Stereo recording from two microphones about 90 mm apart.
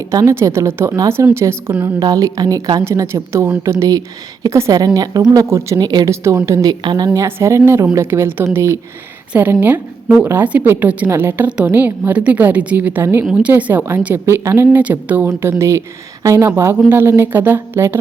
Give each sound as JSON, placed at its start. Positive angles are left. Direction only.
{"t": 0.0, "sound": "a woman's voice", "side_deg": -40}
{"t": 2.0, "sound": "a woman's voice", "side_deg": -45}
{"t": 2.8, "sound": "a woman's voice", "side_deg": -35}
{"t": 3.6, "sound": "a woman's voice", "side_deg": -40}
{"t": 5.7, "sound": "a woman's voice", "side_deg": -50}
{"t": 6.8, "sound": "a woman's voice", "side_deg": -50}
{"t": 7.1, "sound": "a woman's voice", "side_deg": -30}
{"t": 9.3, "sound": "a woman's voice", "side_deg": -20}
{"t": 14.8, "sound": "speech", "side_deg": -15}
{"t": 15.3, "sound": "a woman's voice", "side_deg": -30}